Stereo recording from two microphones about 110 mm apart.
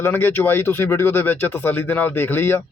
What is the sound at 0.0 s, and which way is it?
Speech, 20° left (ahead or behind).